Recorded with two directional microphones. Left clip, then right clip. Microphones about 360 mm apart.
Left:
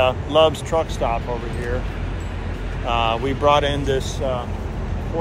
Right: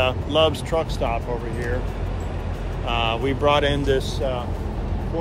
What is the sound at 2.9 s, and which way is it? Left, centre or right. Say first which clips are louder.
Speech: left 3 dB; centre.